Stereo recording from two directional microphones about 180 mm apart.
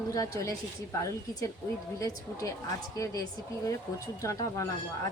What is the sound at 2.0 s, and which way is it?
Speech, 20° left (ahead or behind).